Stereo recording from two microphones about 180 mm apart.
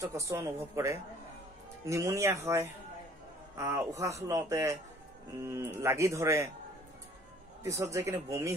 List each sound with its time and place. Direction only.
0.3 s speech: 15° right (ahead or behind)
7.6 s speech: 15° right (ahead or behind)